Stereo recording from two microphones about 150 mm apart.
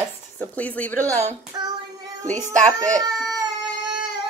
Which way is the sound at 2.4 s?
55° right (ahead or behind).